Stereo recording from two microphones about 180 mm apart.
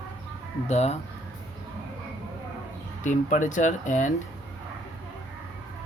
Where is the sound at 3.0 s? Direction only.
45° left (ahead or behind).